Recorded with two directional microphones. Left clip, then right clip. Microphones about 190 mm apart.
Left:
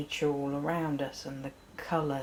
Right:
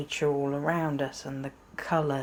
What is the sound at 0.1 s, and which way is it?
Speech, 35° right (ahead or behind).